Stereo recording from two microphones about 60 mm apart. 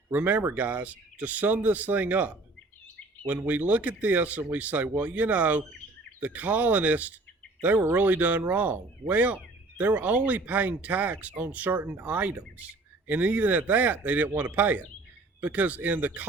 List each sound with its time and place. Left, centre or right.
0.1 s speech: right